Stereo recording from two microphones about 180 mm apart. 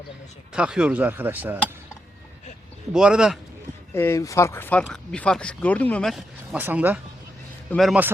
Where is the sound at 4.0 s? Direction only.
15° left (ahead or behind).